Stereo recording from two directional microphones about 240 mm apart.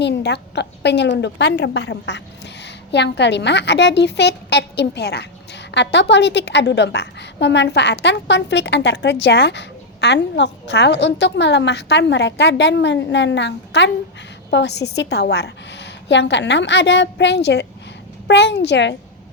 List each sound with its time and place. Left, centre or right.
0.0 s a woman's voice: left